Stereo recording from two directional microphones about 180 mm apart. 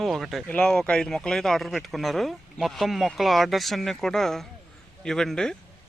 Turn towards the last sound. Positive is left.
turn(degrees=5)  # may be behind; listen again after turning